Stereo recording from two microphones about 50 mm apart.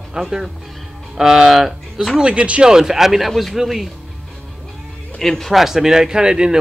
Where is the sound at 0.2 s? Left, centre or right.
Centre.